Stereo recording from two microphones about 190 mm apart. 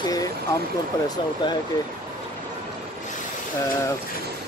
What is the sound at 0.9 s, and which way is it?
Speech, 20° left (ahead or behind).